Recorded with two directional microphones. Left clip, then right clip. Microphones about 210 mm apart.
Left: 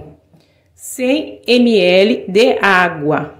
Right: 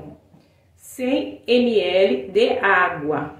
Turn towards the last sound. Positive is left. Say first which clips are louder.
# left 5 dB
turn(degrees=50)  # may be behind; listen again after turning